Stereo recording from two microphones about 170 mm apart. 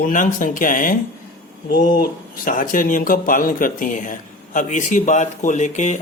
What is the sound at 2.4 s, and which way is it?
Speech, 55° left (ahead or behind).